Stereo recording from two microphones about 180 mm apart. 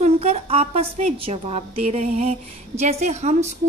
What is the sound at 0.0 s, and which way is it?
A woman's voice, 35° right (ahead or behind).